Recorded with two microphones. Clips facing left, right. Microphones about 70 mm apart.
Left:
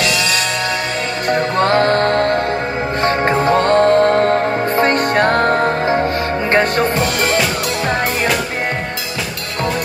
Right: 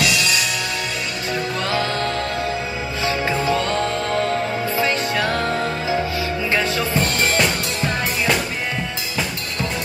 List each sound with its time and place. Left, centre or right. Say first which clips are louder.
1.3 s music: left 9 dB; left